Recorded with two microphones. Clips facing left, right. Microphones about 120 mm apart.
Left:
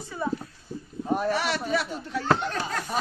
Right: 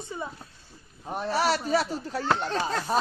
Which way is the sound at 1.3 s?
35° right (ahead or behind).